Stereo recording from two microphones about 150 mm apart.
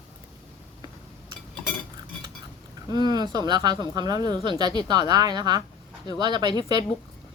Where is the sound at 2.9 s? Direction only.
25° right (ahead or behind).